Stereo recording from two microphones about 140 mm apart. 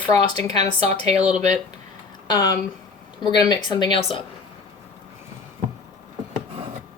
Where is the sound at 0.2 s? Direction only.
30° left (ahead or behind).